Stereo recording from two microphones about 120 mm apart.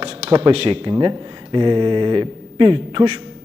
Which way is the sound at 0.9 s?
40° right (ahead or behind).